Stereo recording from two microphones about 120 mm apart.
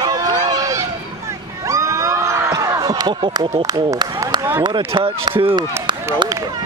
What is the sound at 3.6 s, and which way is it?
Speech, 30° right (ahead or behind).